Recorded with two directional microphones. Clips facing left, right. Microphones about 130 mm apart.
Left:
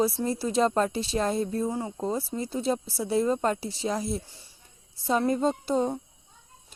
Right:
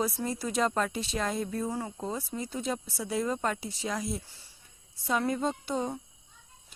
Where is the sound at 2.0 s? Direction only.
35° left (ahead or behind).